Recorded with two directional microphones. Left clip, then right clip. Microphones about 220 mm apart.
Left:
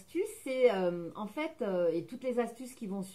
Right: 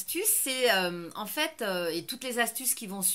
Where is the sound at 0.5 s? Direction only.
15° right (ahead or behind).